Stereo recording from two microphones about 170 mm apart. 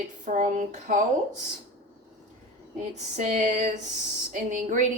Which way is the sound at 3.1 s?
45° right (ahead or behind).